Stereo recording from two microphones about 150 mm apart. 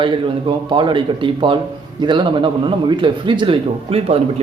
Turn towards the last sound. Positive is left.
turn(degrees=-40)  # may be behind; listen again after turning